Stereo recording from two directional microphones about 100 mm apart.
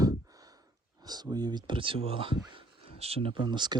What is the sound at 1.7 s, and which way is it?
Speech, 60° right (ahead or behind).